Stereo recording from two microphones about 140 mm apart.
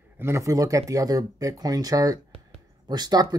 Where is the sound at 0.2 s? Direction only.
20° right (ahead or behind).